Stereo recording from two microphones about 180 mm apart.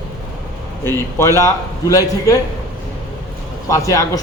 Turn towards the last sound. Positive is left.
turn(degrees=15)  # may be behind; listen again after turning